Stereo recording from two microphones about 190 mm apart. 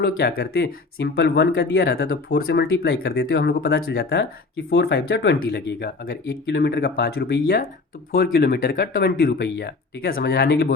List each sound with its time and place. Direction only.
0.0 s speech: 55° left (ahead or behind)